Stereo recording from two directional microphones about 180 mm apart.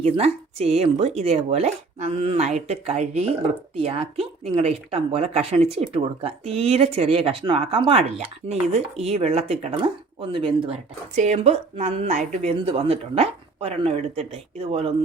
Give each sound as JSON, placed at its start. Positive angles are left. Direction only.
{"t": 0.0, "sound": "speech", "side_deg": -35}